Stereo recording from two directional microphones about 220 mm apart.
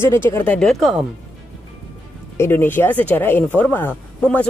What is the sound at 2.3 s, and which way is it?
Speech, 10° left (ahead or behind).